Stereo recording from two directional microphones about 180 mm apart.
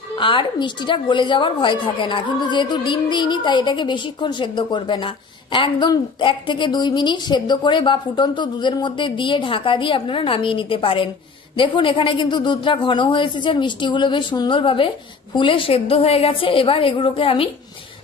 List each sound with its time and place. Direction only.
0.2 s a woman's voice: 25° left (ahead or behind)